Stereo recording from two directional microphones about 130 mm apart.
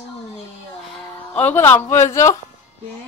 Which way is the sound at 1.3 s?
15° left (ahead or behind).